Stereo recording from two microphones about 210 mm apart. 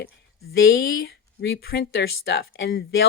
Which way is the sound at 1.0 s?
50° left (ahead or behind).